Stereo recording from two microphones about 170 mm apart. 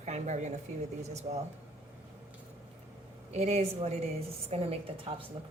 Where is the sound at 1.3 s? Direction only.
30° right (ahead or behind).